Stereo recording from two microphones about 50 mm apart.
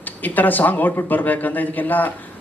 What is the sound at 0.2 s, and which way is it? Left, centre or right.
A man's voice, left.